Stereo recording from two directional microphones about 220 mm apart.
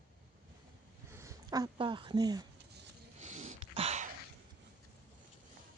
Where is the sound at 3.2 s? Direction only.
35° right (ahead or behind).